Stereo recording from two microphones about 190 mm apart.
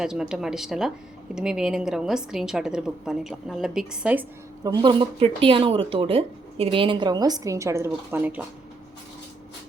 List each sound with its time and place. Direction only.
0.0 s a woman's voice: 5° right (ahead or behind)
4.6 s speech: 20° right (ahead or behind)